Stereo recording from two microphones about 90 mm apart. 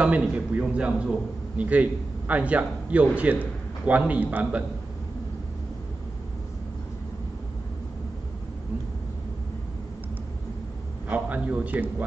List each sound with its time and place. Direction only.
0.0 s a man's voice: 15° right (ahead or behind)
11.1 s a man's voice: 15° right (ahead or behind)